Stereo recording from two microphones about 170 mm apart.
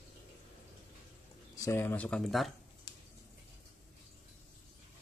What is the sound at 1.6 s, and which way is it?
Speech, 15° left (ahead or behind).